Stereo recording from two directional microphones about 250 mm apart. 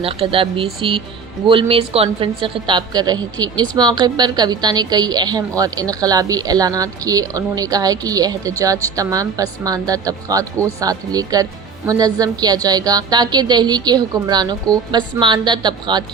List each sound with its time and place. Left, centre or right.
0.0 s a woman's voice: right